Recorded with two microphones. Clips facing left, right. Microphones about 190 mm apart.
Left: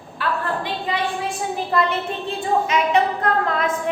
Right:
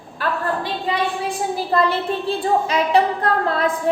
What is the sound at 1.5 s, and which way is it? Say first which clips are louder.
A woman's voice: right 2 dB; 35° right (ahead or behind).